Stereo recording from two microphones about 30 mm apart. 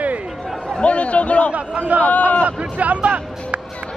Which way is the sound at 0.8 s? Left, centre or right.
Left.